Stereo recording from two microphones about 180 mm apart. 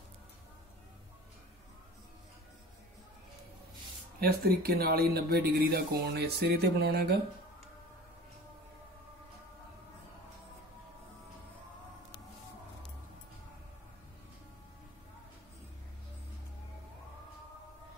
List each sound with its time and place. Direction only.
4.2 s speech: 60° right (ahead or behind)